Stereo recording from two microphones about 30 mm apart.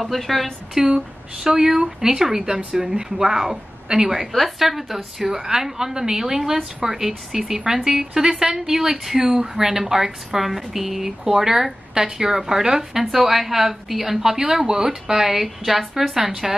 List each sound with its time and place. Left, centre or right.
0.0 s a woman's voice: centre
0.7 s speech: centre
14.2 s speech: centre